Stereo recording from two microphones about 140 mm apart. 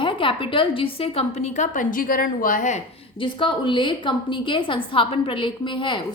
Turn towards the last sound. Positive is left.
turn(degrees=35)  # may be behind; listen again after turning